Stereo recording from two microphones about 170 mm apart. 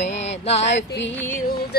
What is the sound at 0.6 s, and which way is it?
Music, 90° left.